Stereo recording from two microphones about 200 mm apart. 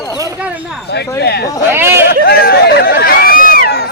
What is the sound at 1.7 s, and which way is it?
Speech, 10° right (ahead or behind).